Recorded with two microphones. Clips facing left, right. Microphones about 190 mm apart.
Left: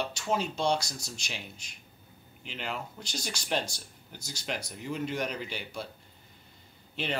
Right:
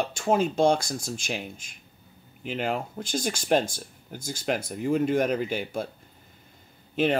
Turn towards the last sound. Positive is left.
turn(degrees=-50)  # may be behind; listen again after turning